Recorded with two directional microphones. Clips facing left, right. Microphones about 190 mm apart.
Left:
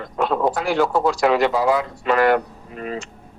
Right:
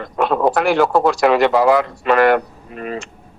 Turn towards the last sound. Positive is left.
turn(degrees=-65)  # may be behind; listen again after turning